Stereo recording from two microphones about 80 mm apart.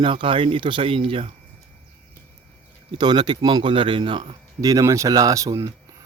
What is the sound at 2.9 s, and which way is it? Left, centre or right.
Speech, right.